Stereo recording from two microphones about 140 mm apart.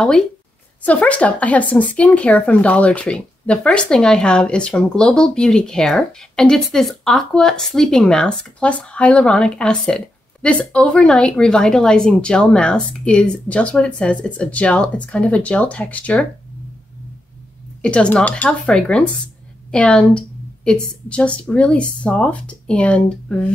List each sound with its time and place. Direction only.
0.8 s speech: 10° left (ahead or behind)
17.8 s speech: 10° left (ahead or behind)